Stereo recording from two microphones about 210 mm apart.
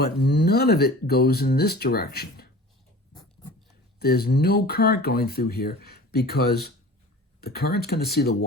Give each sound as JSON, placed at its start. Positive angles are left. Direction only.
{"t": 0.0, "sound": "speech", "side_deg": 50}
{"t": 3.1, "sound": "a sound", "side_deg": 20}
{"t": 4.0, "sound": "speech", "side_deg": 50}